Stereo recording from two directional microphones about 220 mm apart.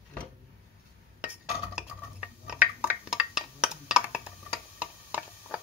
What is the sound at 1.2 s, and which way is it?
Dishes, 5° right (ahead or behind).